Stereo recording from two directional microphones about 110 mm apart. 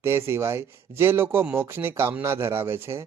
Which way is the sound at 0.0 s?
25° right (ahead or behind).